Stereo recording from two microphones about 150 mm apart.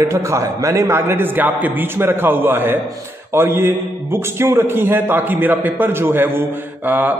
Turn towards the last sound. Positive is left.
turn(degrees=-10)  # may be behind; listen again after turning